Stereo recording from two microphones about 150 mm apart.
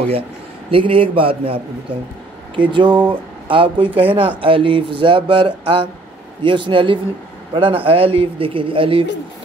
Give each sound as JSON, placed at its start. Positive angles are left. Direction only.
{"t": 0.7, "sound": "speech", "side_deg": -35}